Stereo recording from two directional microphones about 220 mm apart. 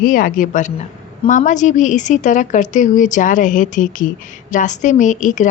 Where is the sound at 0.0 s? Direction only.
40° left (ahead or behind).